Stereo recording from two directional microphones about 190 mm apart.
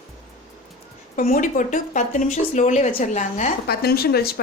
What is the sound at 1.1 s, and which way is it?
Speech, 45° left (ahead or behind).